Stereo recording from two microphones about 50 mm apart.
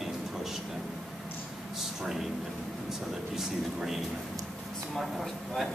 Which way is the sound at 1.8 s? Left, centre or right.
Centre.